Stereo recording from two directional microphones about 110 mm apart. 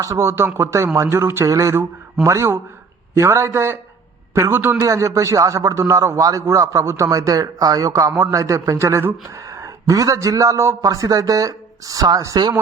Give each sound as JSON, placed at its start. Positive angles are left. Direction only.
{"t": 0.0, "sound": "speech", "side_deg": -25}
{"t": 4.8, "sound": "a man's voice", "side_deg": -30}